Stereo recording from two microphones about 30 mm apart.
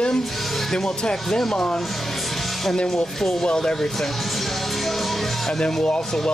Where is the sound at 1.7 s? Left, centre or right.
Centre.